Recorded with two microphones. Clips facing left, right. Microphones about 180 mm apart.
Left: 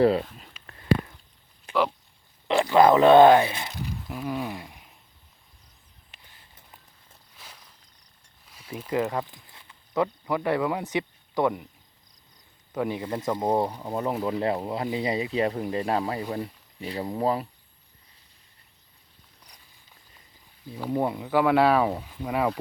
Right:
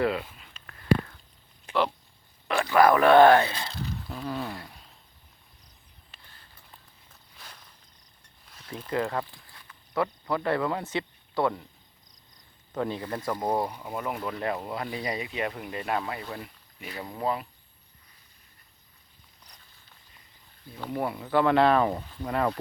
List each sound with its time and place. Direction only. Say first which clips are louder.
0.0 s speech: left 6 dB; 35° left (ahead or behind)
2.5 s speech: left 3 dB; 20° left (ahead or behind)
6.1 s a sound: even; 20° left (ahead or behind)
7.3 s walk: even; 5° left (ahead or behind)
8.4 s a sound: left 3 dB; 10° left (ahead or behind)
9.0 s speech: left 2 dB; 15° left (ahead or behind)
12.7 s speech: left 2 dB; 15° left (ahead or behind); by 17.4 s 35° left (ahead or behind)
20.9 s speech: left 4 dB; 20° left (ahead or behind)
21.2 s speech: even; 5° left (ahead or behind)